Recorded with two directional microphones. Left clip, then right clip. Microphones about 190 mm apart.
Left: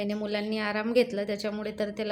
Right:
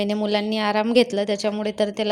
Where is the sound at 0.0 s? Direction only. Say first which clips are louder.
Right 8 dB; 35° right (ahead or behind).